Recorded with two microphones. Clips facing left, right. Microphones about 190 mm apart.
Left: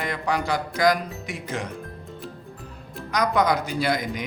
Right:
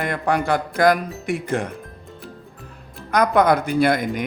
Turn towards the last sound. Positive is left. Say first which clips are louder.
# right 6 dB
turn(degrees=-55)  # may be behind; listen again after turning